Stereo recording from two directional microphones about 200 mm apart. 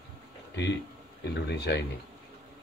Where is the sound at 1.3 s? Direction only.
55° left (ahead or behind).